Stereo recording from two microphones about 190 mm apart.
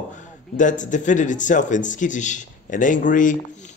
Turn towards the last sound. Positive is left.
turn(degrees=45)  # may be behind; listen again after turning